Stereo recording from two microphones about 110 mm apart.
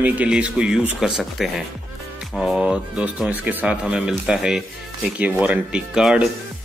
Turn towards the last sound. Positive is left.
turn(degrees=-10)  # may be behind; listen again after turning